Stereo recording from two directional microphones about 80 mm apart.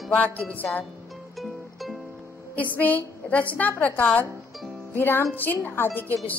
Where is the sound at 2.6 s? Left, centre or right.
Left.